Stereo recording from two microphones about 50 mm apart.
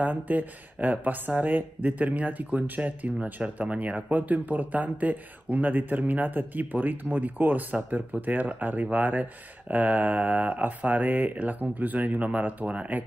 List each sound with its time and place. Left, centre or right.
0.0 s speech: right